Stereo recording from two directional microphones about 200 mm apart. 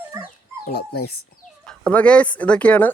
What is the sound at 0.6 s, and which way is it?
Speech, 50° left (ahead or behind).